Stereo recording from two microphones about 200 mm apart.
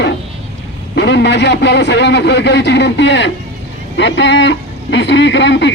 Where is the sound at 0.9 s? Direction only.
60° left (ahead or behind).